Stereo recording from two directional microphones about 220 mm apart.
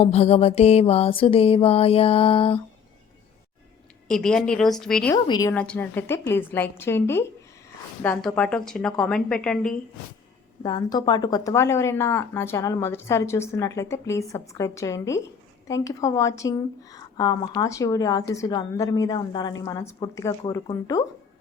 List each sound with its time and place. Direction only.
0.0 s mantra: 30° left (ahead or behind)
4.1 s a woman's voice: 5° left (ahead or behind)
5.1 s a woman's voice: 15° left (ahead or behind)
5.5 s a woman's voice: 5° left (ahead or behind)
10.6 s a woman's voice: 20° left (ahead or behind)